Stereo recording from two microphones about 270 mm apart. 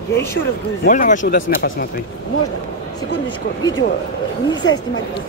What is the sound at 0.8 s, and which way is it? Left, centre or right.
A man's voice, left.